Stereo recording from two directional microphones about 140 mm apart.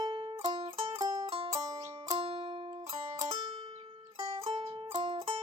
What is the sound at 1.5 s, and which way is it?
Music, 25° right (ahead or behind).